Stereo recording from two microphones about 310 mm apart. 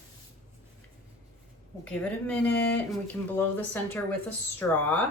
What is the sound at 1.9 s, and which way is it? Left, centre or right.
A woman's voice, centre.